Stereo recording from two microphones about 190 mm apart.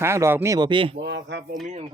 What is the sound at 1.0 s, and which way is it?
Speech, 70° right (ahead or behind).